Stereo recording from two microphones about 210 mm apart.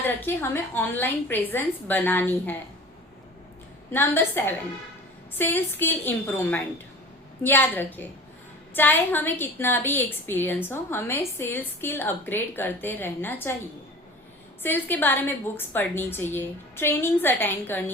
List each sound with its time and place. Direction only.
0.0 s a woman's voice: 10° left (ahead or behind)
3.9 s a woman's voice: 10° left (ahead or behind)
14.6 s a woman's voice: 10° left (ahead or behind)